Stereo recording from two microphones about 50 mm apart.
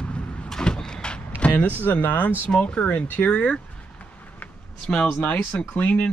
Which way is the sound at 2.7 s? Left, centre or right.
Left.